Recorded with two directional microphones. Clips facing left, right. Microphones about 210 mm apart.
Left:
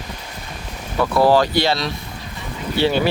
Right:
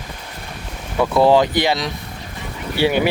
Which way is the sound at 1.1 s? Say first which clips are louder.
Right 1 dB; 20° right (ahead or behind).